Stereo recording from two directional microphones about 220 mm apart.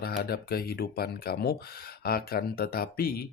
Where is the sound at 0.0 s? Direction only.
45° left (ahead or behind).